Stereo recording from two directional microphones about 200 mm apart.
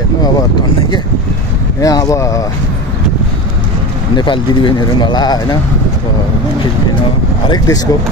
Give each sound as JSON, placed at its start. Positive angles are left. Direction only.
{"t": 1.8, "sound": "speech", "side_deg": 15}
{"t": 4.2, "sound": "speech", "side_deg": 20}
{"t": 7.4, "sound": "speech", "side_deg": 20}